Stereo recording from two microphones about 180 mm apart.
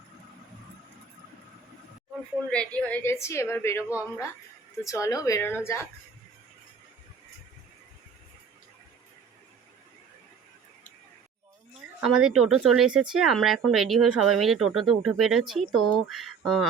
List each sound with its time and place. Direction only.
2.5 s a woman's voice: 5° left (ahead or behind)
4.9 s a woman's voice: 15° left (ahead or behind)
11.9 s speech: 5° right (ahead or behind)